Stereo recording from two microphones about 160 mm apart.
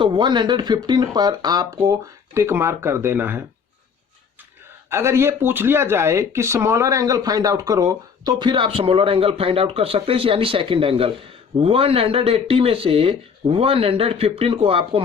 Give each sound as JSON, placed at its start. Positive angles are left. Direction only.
{"t": 0.0, "sound": "speech", "side_deg": -30}
{"t": 4.9, "sound": "speech", "side_deg": -15}